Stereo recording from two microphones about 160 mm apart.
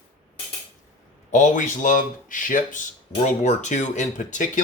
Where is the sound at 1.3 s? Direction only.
50° left (ahead or behind).